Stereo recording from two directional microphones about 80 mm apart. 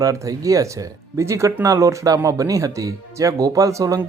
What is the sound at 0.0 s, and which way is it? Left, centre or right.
Speech, right.